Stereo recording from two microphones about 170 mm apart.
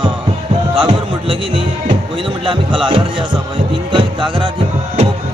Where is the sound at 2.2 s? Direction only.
30° right (ahead or behind).